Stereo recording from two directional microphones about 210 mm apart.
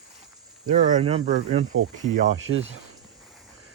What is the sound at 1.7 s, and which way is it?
Speech, 75° right (ahead or behind).